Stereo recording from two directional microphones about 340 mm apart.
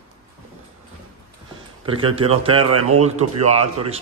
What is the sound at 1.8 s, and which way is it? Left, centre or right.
Speech, centre.